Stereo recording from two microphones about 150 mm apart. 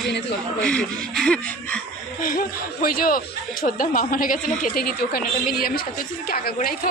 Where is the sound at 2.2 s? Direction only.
70° left (ahead or behind).